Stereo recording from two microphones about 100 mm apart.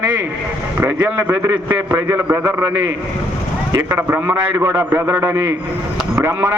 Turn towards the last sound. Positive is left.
turn(degrees=-25)  # may be behind; listen again after turning